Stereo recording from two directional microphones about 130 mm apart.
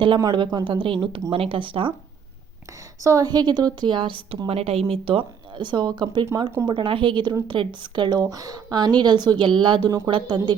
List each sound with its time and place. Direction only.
0.0 s a woman's voice: 35° right (ahead or behind)
3.0 s a woman's voice: 25° right (ahead or behind)
6.2 s speech: 25° right (ahead or behind)
6.7 s a woman's voice: 40° right (ahead or behind)